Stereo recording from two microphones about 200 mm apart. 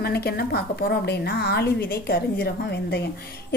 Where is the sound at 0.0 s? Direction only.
50° left (ahead or behind).